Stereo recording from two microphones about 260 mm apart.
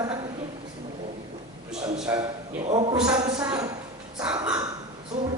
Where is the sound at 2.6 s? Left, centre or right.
Right.